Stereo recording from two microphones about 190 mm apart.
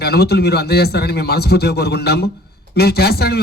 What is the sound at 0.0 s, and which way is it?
A man's voice, 60° left (ahead or behind).